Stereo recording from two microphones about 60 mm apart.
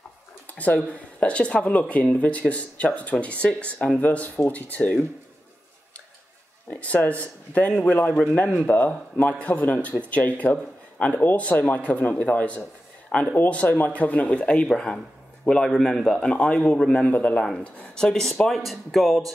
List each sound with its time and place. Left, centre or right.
0.8 s speech: left
6.7 s speech: left
14.7 s a man's voice: centre
16.3 s speech: left
17.7 s speech: centre